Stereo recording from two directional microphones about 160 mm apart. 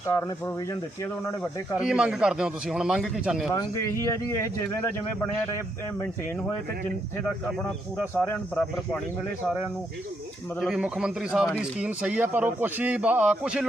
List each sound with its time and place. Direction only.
0.1 s speech: 15° left (ahead or behind)
1.8 s a man's voice: 5° right (ahead or behind)
3.5 s speech: 20° left (ahead or behind)
8.1 s speech: 10° left (ahead or behind)
10.6 s a man's voice: 5° right (ahead or behind)